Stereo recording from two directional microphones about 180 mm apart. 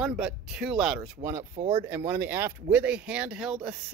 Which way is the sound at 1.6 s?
35° right (ahead or behind).